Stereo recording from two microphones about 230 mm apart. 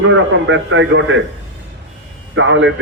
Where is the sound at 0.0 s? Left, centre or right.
Right.